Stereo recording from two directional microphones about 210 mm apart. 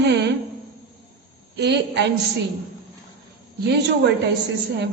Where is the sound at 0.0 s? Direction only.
55° right (ahead or behind).